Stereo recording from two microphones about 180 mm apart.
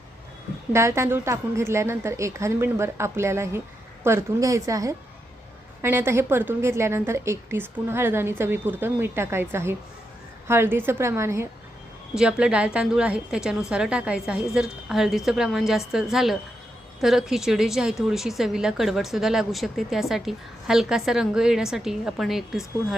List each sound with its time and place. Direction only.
0.7 s a woman's voice: 15° right (ahead or behind)